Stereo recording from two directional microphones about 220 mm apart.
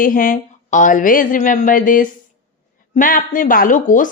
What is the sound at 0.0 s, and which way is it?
A woman's voice, 40° left (ahead or behind).